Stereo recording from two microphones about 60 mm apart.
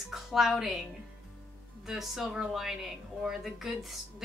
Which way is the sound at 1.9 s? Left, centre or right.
Centre.